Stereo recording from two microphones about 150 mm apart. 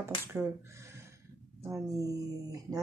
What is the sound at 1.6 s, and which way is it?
Speech, 20° right (ahead or behind).